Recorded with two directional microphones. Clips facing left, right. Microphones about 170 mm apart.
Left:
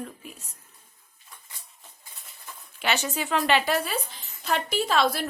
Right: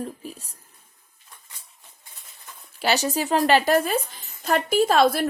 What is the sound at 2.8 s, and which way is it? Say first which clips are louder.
A woman's voice: right 5 dB; 40° right (ahead or behind).